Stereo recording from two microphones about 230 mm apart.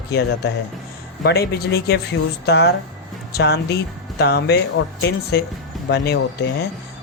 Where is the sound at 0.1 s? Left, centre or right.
Left.